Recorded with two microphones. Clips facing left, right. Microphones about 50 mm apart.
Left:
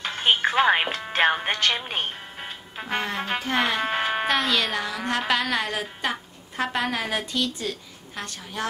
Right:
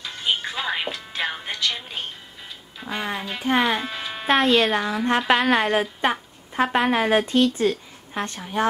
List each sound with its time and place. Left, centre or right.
0.0 s speech: left
3.2 s a woman's voice: left
3.4 s speech: centre
3.8 s music: left
4.3 s a woman's voice: right